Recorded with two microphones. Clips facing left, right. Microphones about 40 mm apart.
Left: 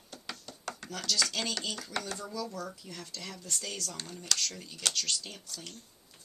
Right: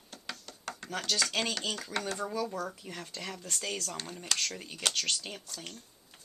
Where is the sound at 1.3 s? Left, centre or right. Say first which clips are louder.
Right 2 dB; centre.